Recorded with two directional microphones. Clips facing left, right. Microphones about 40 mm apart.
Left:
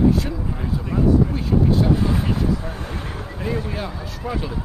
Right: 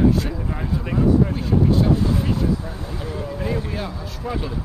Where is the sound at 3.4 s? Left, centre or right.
Centre.